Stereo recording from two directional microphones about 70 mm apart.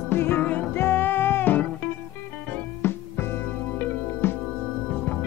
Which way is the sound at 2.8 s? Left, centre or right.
Left.